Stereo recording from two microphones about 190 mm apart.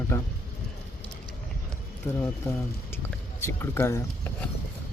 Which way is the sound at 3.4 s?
15° left (ahead or behind).